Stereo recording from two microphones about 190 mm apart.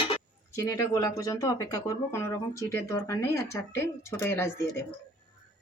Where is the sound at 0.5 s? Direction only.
15° left (ahead or behind).